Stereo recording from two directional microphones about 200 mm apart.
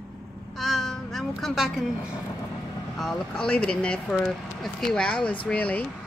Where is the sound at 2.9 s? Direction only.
5° left (ahead or behind).